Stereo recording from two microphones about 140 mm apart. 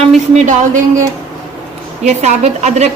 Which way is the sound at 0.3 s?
65° right (ahead or behind).